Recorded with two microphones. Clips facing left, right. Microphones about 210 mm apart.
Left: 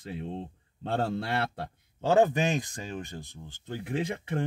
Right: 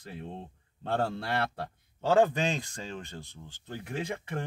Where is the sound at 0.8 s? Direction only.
20° left (ahead or behind).